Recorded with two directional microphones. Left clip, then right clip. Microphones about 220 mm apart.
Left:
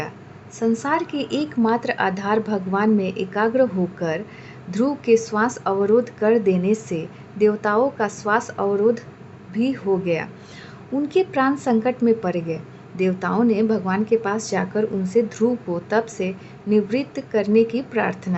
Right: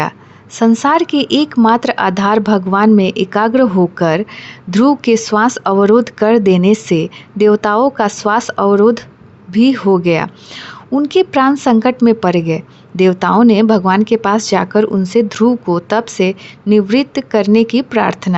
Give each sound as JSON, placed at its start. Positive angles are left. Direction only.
{"t": 0.5, "sound": "a woman's voice", "side_deg": -40}